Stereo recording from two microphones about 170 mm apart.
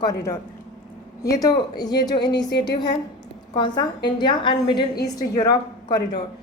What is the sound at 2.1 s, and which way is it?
Speech, 85° left.